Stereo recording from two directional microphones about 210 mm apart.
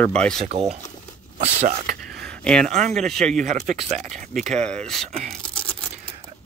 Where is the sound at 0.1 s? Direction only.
5° left (ahead or behind).